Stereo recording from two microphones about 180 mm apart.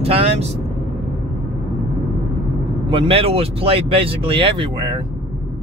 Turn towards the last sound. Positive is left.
turn(degrees=-30)  # may be behind; listen again after turning